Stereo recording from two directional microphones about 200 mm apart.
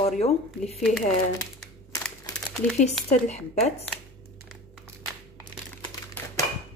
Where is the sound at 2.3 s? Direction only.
Centre (ahead or behind).